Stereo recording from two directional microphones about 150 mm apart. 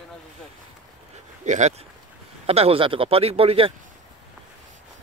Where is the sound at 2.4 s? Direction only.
40° right (ahead or behind).